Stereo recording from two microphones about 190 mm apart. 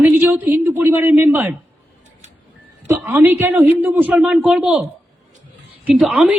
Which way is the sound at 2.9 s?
10° right (ahead or behind).